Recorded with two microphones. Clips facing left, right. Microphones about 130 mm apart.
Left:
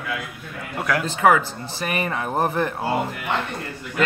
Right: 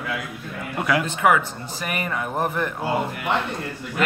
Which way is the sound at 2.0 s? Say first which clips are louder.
Left 2 dB; 30° left (ahead or behind).